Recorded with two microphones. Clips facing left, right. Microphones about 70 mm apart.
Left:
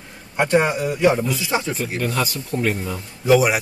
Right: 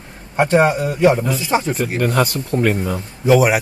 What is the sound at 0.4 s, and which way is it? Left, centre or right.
A man's voice, right.